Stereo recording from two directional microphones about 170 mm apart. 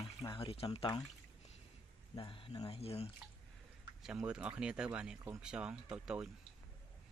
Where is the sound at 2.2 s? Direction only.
30° left (ahead or behind).